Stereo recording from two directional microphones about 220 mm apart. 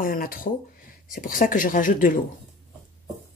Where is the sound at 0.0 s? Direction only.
40° left (ahead or behind).